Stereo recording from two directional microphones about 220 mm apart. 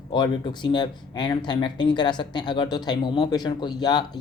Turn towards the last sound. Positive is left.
turn(degrees=20)  # may be behind; listen again after turning